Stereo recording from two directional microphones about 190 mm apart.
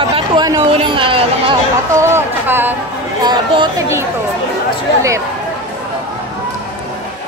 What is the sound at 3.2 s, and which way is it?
Speech, 25° right (ahead or behind).